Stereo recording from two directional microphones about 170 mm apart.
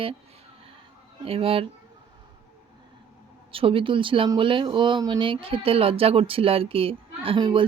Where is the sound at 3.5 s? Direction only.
30° right (ahead or behind).